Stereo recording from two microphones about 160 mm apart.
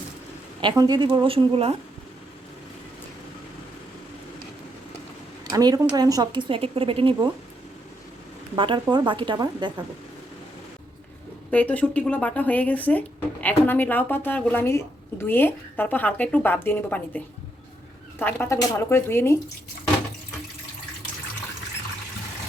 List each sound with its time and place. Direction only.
0.6 s a woman's voice: 25° right (ahead or behind)
5.5 s speech: 25° right (ahead or behind)
6.5 s a woman's voice: 35° right (ahead or behind)
8.5 s speech: 30° right (ahead or behind)
11.5 s speech: 10° left (ahead or behind)